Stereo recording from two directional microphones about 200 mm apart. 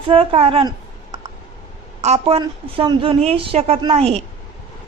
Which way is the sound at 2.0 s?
30° right (ahead or behind).